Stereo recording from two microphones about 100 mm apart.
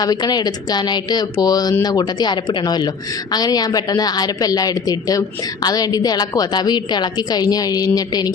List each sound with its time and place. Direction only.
0.0 s a woman's voice: 40° left (ahead or behind)